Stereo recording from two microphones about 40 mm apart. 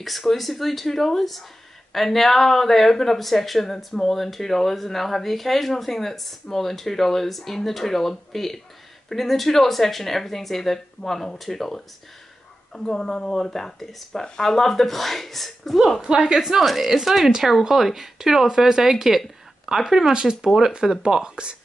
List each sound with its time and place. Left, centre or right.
0.0 s speech: centre
16.0 s speech: centre
16.3 s speech: centre; by 21.5 s right